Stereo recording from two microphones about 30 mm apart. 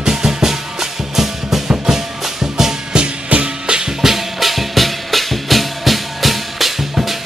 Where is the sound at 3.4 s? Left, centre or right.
Right.